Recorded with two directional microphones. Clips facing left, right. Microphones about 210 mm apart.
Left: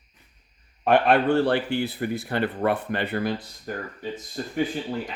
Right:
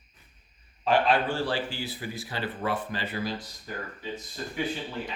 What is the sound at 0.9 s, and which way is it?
Speech, 60° left (ahead or behind).